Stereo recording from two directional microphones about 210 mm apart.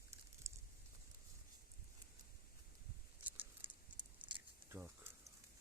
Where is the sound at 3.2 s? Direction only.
10° right (ahead or behind).